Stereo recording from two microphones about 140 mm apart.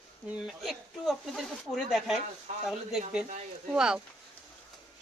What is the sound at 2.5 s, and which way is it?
Speech, 55° right (ahead or behind).